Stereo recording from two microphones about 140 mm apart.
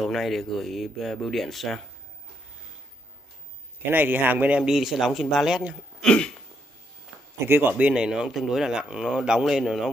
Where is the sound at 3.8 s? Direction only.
15° right (ahead or behind).